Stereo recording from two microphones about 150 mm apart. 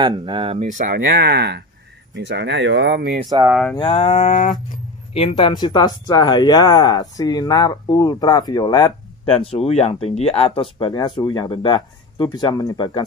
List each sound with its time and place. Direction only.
0.0 s speech: 30° right (ahead or behind)
0.7 s speech: 60° right (ahead or behind); by 3.3 s 90° right
3.7 s livestock: 40° left (ahead or behind); by 4.6 s 60° left (ahead or behind)
5.1 s speech: 40° left (ahead or behind)
9.3 s speech: 40° left (ahead or behind)